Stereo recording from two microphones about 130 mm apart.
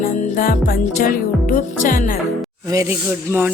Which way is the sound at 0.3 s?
90° left.